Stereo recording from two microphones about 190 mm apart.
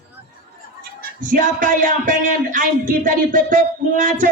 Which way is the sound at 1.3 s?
45° right (ahead or behind).